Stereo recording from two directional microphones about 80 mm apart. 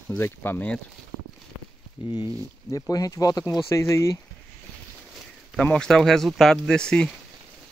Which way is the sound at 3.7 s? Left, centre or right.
Left.